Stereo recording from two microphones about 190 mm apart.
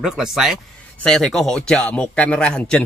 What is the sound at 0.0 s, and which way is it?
A man's voice, centre (ahead or behind).